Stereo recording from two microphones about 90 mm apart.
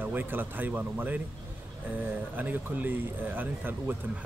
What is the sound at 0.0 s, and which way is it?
Speech, 20° right (ahead or behind).